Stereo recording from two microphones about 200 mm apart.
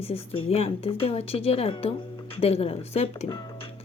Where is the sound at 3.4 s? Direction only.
25° left (ahead or behind).